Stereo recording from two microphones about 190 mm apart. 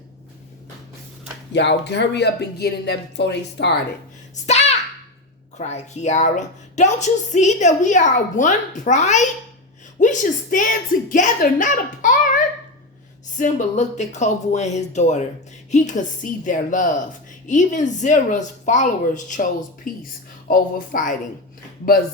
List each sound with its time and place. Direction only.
1.5 s speech: 65° left (ahead or behind)
4.4 s a sound: 35° left (ahead or behind)
5.5 s a woman's voice: 35° left (ahead or behind)
13.4 s a woman's voice: 40° left (ahead or behind)